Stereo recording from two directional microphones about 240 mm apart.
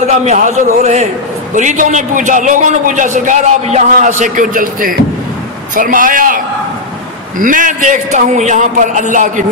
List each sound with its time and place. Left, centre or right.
0.0 s a man's voice: right